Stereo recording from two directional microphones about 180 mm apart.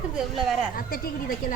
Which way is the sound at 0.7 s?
55° left (ahead or behind).